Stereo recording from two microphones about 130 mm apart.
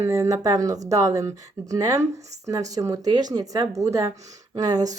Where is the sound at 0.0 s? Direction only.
20° right (ahead or behind).